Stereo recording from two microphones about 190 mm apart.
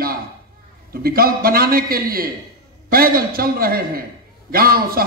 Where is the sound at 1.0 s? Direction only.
50° right (ahead or behind).